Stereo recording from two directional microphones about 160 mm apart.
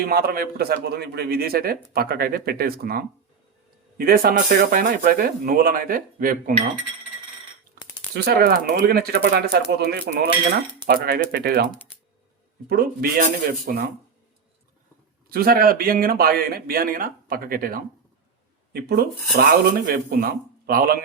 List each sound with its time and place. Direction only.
0.0 s a man's voice: 70° right (ahead or behind)
8.1 s speech: 80° right
12.6 s a man's voice: 65° right (ahead or behind)
15.3 s a man's voice: 70° right (ahead or behind)
18.7 s speech: 80° right
19.9 s speech: 70° right (ahead or behind)